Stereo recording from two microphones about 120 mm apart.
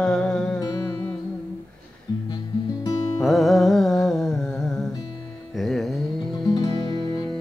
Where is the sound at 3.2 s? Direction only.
Centre (ahead or behind).